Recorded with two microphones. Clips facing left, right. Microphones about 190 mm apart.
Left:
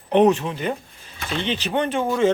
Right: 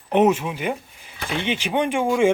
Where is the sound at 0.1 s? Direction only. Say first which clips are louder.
Left 1 dB; 10° right (ahead or behind).